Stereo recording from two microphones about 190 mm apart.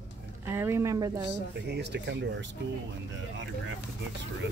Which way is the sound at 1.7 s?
65° right (ahead or behind).